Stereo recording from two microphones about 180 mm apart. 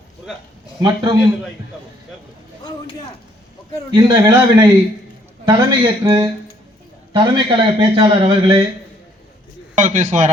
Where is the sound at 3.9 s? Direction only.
25° right (ahead or behind).